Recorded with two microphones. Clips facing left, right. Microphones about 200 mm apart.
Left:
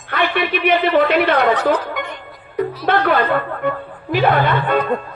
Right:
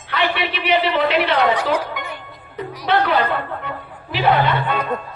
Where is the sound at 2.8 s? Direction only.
50° left (ahead or behind).